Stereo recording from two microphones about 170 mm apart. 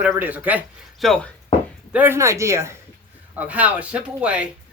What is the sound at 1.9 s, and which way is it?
Speech, 10° right (ahead or behind).